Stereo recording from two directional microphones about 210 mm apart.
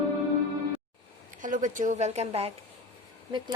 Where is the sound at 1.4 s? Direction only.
35° right (ahead or behind).